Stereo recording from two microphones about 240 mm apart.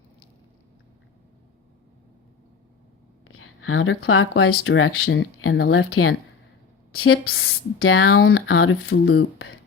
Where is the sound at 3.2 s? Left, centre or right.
Left.